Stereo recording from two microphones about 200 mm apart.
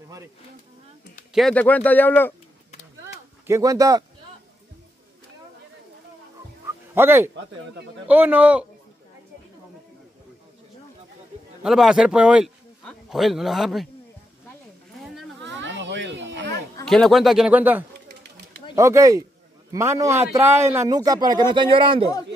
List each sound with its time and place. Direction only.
1.3 s speech: 5° left (ahead or behind)
3.4 s a man's voice: 15° right (ahead or behind)
6.9 s a man's voice: 10° right (ahead or behind)
11.6 s a man's voice: centre (ahead or behind)
15.4 s children playing: 65° right (ahead or behind)
16.8 s a man's voice: centre (ahead or behind); by 22.1 s 25° right (ahead or behind)